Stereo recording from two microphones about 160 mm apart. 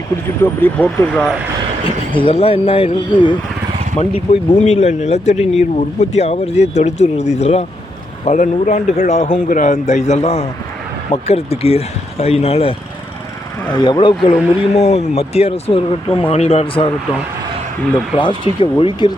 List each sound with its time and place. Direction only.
0.4 s speech: 10° left (ahead or behind)
2.1 s speech: 35° left (ahead or behind)
3.9 s speech: 40° left (ahead or behind)
13.7 s speech: 25° left (ahead or behind)
14.8 s speech: 40° left (ahead or behind)
18.2 s speech: 30° left (ahead or behind)